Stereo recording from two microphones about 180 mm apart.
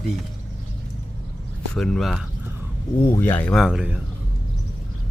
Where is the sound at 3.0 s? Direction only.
10° left (ahead or behind); by 4.0 s 5° right (ahead or behind).